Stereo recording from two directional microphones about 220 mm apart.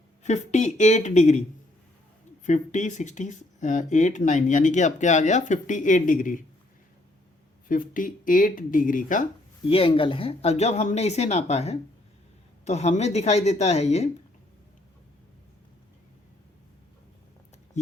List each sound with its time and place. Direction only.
0.2 s speech: 30° left (ahead or behind)
2.4 s speech: 35° left (ahead or behind)
7.7 s speech: 35° left (ahead or behind)
9.6 s speech: 25° left (ahead or behind)